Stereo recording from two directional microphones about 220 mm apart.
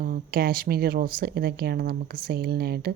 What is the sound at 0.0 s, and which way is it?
Speech, 45° right (ahead or behind).